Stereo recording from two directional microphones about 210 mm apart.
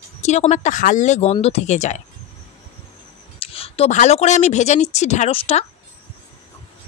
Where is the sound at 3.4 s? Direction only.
25° left (ahead or behind).